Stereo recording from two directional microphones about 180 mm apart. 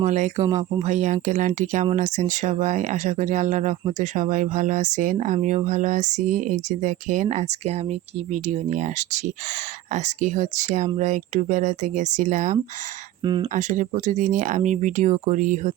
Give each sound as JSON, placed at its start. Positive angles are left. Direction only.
{"t": 0.0, "sound": "speech", "side_deg": -40}
{"t": 13.2, "sound": "speech", "side_deg": -25}
{"t": 13.5, "sound": "speech", "side_deg": -40}